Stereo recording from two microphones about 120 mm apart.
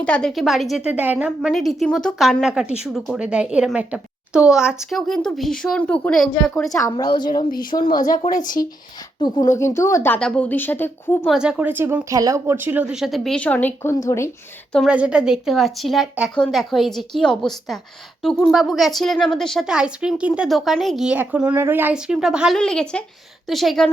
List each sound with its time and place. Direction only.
0.0 s a woman's voice: 5° left (ahead or behind)
0.9 s speech: 15° right (ahead or behind)
1.4 s a woman's voice: centre (ahead or behind)
4.9 s a woman's voice: 5° left (ahead or behind)
6.9 s speech: 40° left (ahead or behind)
9.2 s speech: 35° left (ahead or behind)
9.6 s a woman's voice: 25° left (ahead or behind)
10.2 s a woman's voice: 5° left (ahead or behind)
11.3 s a woman's voice: 5° right (ahead or behind); by 14.3 s 25° left (ahead or behind)
14.8 s a woman's voice: 10° right (ahead or behind)
21.9 s speech: 5° right (ahead or behind)
22.5 s a woman's voice: 5° left (ahead or behind)